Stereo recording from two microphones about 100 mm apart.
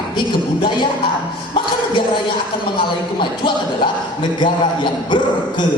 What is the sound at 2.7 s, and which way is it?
A man's voice, 55° left (ahead or behind).